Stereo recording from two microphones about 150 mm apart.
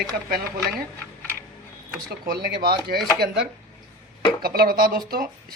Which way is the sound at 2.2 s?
90° right.